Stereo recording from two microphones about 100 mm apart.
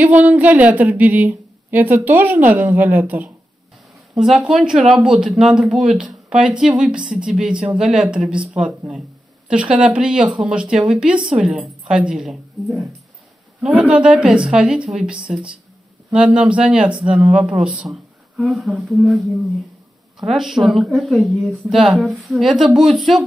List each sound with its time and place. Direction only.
0.0 s a woman's voice: 15° right (ahead or behind)
4.1 s a woman's voice: 5° right (ahead or behind)
13.6 s a woman's voice: 10° right (ahead or behind)
20.2 s speech: 5° right (ahead or behind)